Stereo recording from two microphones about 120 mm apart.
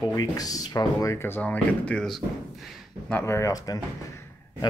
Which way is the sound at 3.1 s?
25° left (ahead or behind).